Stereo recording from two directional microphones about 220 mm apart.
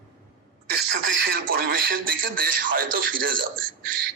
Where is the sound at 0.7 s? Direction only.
50° right (ahead or behind).